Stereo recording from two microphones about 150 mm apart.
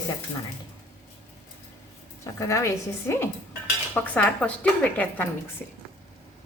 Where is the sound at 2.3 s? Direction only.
20° left (ahead or behind).